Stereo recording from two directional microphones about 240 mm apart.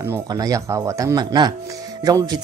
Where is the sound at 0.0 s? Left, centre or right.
Centre.